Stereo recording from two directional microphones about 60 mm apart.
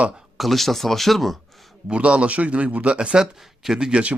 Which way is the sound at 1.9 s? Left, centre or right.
Centre.